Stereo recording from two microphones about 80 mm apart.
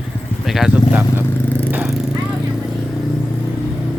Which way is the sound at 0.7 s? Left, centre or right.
Right.